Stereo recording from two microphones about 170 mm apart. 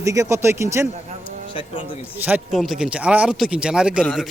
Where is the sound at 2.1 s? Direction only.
10° right (ahead or behind).